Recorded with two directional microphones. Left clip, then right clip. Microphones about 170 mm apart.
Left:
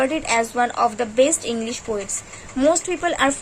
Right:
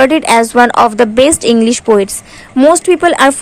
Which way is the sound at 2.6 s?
30° right (ahead or behind).